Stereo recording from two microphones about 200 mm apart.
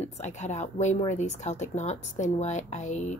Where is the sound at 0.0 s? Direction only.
35° left (ahead or behind).